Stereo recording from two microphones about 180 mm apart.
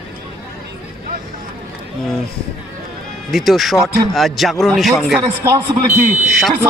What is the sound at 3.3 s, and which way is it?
Speech, centre (ahead or behind).